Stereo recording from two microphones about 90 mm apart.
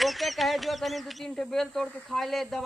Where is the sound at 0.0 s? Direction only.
Centre (ahead or behind).